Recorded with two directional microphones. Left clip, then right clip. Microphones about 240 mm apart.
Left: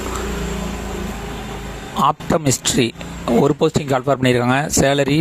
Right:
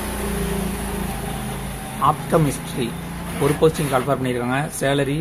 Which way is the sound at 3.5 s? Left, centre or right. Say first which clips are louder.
Even; left.